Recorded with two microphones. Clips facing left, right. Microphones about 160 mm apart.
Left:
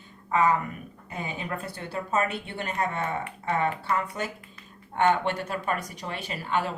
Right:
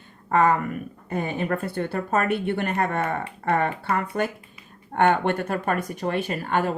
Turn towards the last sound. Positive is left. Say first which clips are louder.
# right 4 dB
turn(degrees=-55)  # may be behind; listen again after turning